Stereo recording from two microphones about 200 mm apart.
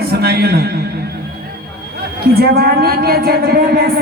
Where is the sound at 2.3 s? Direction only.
50° right (ahead or behind).